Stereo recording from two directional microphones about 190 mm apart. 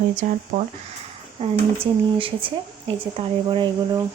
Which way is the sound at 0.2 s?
40° right (ahead or behind).